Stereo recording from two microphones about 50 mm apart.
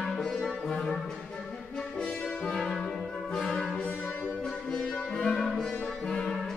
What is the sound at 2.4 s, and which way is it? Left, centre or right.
Brass instrument, centre.